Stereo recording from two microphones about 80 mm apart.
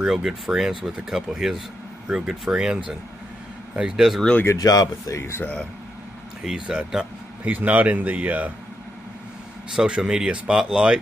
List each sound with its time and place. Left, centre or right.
0.0 s speech: centre
4.6 s speech: left
6.4 s speech: centre
9.8 s speech: centre